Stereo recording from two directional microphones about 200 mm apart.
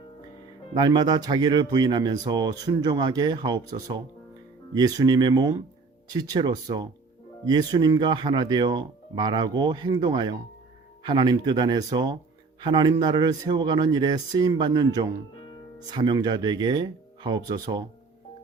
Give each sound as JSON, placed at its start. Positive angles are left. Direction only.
{"t": 0.7, "sound": "speech", "side_deg": -20}